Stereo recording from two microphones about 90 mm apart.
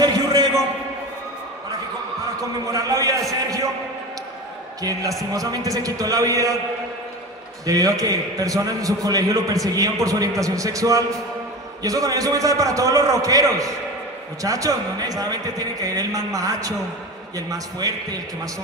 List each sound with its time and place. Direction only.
0.0 s a sound: 40° right (ahead or behind)
2.6 s a man's voice: 40° right (ahead or behind)
5.3 s a man's voice: 40° right (ahead or behind)
7.6 s a man's voice: 40° right (ahead or behind)